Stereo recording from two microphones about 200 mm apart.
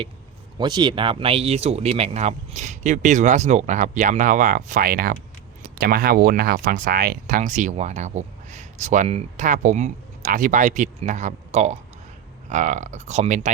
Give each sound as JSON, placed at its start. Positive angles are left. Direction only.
{"t": 0.6, "sound": "speech", "side_deg": -20}